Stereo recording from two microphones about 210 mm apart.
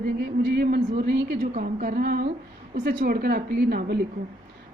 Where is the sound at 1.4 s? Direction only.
35° right (ahead or behind).